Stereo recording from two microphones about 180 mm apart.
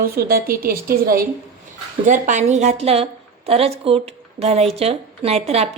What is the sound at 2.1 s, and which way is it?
A woman's voice, 45° right (ahead or behind).